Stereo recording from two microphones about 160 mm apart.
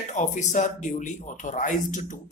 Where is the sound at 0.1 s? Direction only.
50° left (ahead or behind).